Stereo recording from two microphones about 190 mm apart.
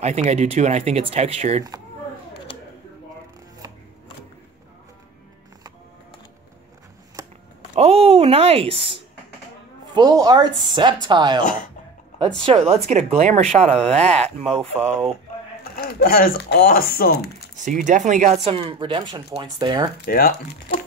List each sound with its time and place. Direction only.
0.0 s speech: 35° right (ahead or behind)
7.7 s speech: 30° right (ahead or behind)
12.4 s speech: 30° right (ahead or behind)
15.7 s speech: 55° left (ahead or behind)
17.6 s speech: 40° right (ahead or behind)
18.4 s speech: 30° right (ahead or behind)
20.1 s speech: 50° left (ahead or behind)